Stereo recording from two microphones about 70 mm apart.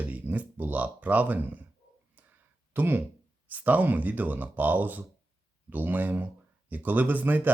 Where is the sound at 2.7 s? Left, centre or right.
Right.